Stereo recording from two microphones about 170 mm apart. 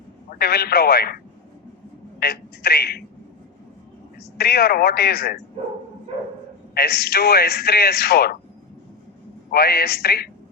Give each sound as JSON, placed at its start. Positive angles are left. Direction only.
{"t": 0.3, "sound": "a man's voice", "side_deg": 65}
{"t": 4.4, "sound": "a man's voice", "side_deg": 65}
{"t": 6.7, "sound": "a man's voice", "side_deg": 65}
{"t": 9.5, "sound": "a man's voice", "side_deg": 65}